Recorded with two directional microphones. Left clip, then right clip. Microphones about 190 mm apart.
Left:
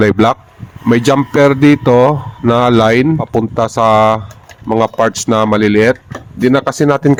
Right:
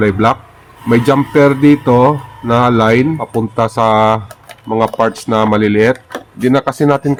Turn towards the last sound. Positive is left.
turn(degrees=40)  # may be behind; listen again after turning